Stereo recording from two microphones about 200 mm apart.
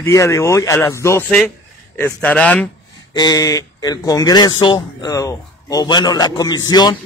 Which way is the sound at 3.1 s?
20° left (ahead or behind).